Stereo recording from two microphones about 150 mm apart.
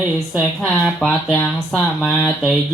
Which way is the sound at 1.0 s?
Centre (ahead or behind).